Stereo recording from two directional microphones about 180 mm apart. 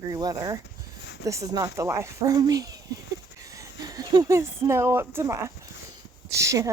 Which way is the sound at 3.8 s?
20° right (ahead or behind).